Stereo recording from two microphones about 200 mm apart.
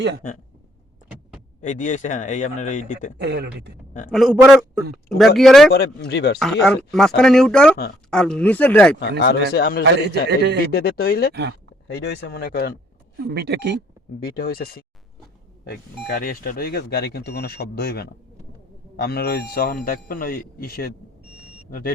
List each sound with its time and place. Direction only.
1.6 s speech: 40° left (ahead or behind)
3.2 s a woman's voice: 55° right (ahead or behind)
4.1 s speech: centre (ahead or behind)
5.7 s speech: 55° left (ahead or behind)
6.4 s speech: centre (ahead or behind)
9.0 s speech: 55° left (ahead or behind)
10.2 s a woman's voice: 55° right (ahead or behind)
10.7 s speech: 50° left (ahead or behind)
13.2 s a woman's voice: 55° right (ahead or behind)
14.3 s speech: 50° left (ahead or behind)